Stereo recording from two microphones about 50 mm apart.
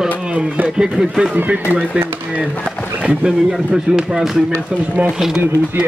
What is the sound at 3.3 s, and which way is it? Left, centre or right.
Speech, centre.